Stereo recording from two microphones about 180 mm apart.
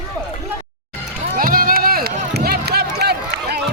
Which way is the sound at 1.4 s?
55° right (ahead or behind).